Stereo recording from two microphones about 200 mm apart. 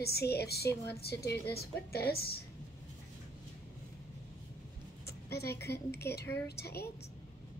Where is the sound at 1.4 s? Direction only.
50° left (ahead or behind).